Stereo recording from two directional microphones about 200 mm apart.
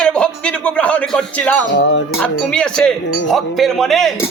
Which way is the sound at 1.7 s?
65° left (ahead or behind).